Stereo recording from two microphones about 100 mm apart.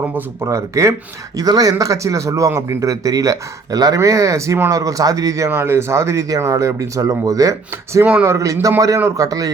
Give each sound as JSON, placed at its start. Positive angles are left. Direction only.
{"t": 0.4, "sound": "a man's voice", "side_deg": -30}
{"t": 5.5, "sound": "a man's voice", "side_deg": -25}
{"t": 8.0, "sound": "speech", "side_deg": -15}
{"t": 8.3, "sound": "a man's voice", "side_deg": -35}